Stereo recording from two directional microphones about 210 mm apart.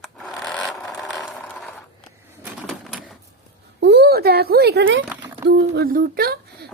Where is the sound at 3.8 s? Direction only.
55° right (ahead or behind).